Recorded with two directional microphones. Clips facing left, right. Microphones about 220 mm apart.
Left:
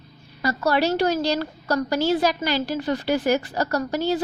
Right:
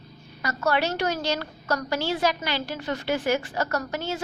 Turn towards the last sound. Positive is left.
turn(degrees=35)  # may be behind; listen again after turning